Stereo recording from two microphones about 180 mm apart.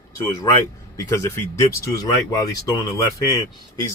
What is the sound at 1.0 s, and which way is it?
Speech, 15° left (ahead or behind).